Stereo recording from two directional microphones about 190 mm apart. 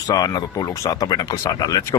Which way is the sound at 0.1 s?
20° left (ahead or behind).